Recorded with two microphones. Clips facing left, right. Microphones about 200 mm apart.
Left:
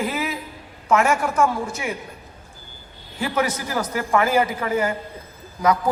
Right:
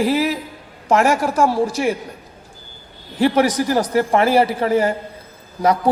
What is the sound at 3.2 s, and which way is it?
A man's voice, 35° right (ahead or behind).